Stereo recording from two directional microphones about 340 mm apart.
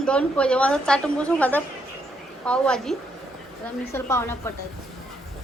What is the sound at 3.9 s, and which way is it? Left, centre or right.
Speech, centre.